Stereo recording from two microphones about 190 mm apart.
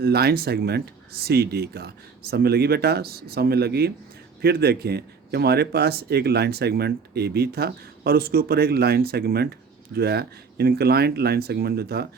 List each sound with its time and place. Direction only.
0.0 s speech: 55° right (ahead or behind)